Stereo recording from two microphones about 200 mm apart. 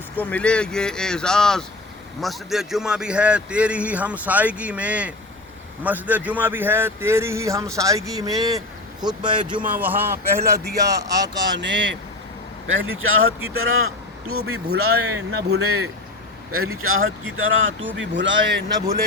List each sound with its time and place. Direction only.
0.2 s a man's voice: 5° left (ahead or behind); by 9.6 s 25° right (ahead or behind)
9.7 s a man's voice: 10° right (ahead or behind)
11.5 s speech: 65° right (ahead or behind)
12.6 s speech: 85° right
14.8 s speech: 55° right (ahead or behind)
15.5 s speech: 90° right
17.9 s speech: 70° right (ahead or behind)